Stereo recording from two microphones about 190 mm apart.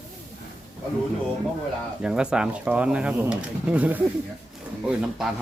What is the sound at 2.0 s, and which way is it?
Speech, 5° right (ahead or behind).